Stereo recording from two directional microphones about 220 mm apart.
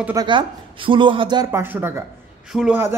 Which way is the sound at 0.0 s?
15° right (ahead or behind).